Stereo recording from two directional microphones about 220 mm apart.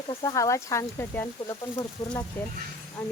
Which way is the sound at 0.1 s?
15° left (ahead or behind).